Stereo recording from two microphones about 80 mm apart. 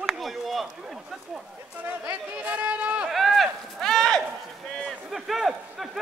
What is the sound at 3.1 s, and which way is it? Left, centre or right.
Run, centre.